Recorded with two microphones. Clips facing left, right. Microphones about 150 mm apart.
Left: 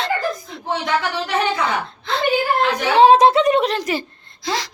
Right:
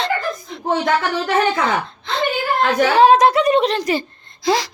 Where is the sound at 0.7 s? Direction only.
45° right (ahead or behind).